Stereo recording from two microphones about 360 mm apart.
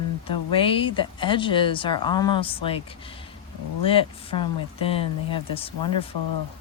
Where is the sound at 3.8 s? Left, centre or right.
Centre.